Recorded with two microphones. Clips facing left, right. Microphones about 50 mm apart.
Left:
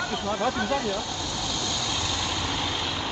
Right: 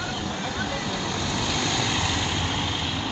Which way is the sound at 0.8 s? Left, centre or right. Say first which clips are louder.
Right 1 dB; right.